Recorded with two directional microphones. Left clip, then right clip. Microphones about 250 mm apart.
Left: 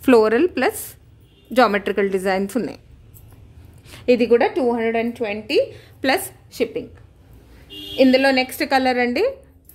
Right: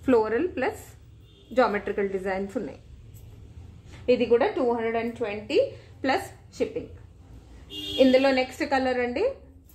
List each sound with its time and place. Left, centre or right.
0.0 s a woman's voice: left
4.0 s a woman's voice: left
7.9 s a woman's voice: left